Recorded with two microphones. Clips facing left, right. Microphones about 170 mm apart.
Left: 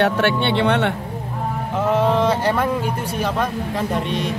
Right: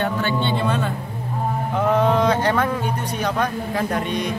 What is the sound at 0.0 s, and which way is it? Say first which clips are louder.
Speech: left 4 dB; 75° left (ahead or behind).